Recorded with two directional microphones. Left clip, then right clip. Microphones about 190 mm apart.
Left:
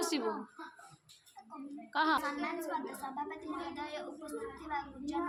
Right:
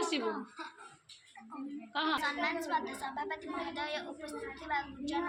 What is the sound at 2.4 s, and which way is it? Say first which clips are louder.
A woman's voice: right 4 dB; 20° left (ahead or behind).